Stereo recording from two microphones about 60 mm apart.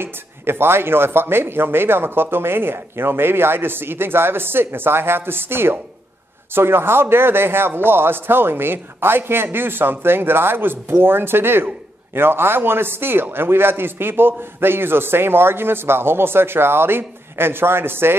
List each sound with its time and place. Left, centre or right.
0.0 s a man's voice: right